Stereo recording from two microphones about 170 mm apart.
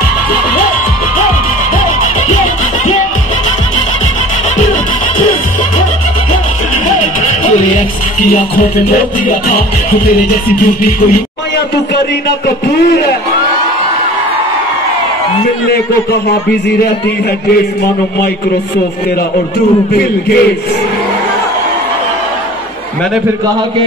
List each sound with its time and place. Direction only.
12.4 s a man's voice: 70° left (ahead or behind)
20.0 s speech: 65° left (ahead or behind)